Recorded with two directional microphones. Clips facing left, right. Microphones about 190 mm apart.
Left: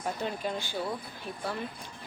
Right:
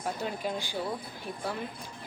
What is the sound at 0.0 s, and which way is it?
Speech, 10° right (ahead or behind).